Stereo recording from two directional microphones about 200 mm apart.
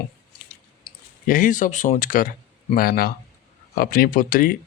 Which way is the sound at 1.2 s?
40° left (ahead or behind).